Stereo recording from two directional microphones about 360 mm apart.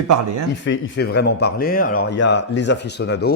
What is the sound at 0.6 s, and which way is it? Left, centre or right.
Speech, left.